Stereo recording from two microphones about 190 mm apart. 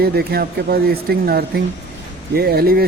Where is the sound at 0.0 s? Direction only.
55° right (ahead or behind).